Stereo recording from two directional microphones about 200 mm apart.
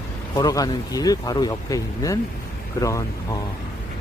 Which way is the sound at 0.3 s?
20° left (ahead or behind).